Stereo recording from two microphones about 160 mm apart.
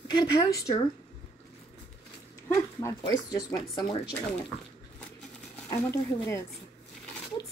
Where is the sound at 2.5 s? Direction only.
20° left (ahead or behind).